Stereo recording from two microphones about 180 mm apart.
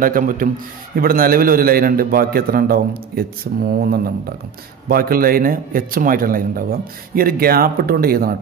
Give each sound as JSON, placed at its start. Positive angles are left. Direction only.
{"t": 0.0, "sound": "a man's voice", "side_deg": -50}